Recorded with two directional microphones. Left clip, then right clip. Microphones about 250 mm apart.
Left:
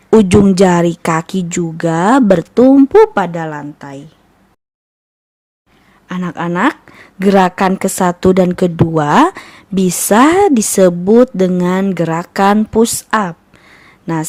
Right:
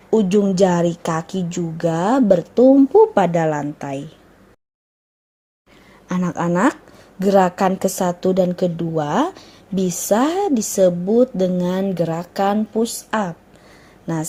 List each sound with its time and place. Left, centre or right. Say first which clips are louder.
0.1 s a woman's voice: left 8 dB; left
3.2 s a woman's voice: even; centre
6.1 s a woman's voice: left 2 dB; centre; by 10.9 s left
11.0 s speech: left 7 dB; left
11.3 s a woman's voice: left 6 dB; left